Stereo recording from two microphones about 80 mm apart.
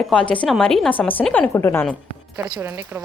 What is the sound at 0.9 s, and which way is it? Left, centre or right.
Speech, left.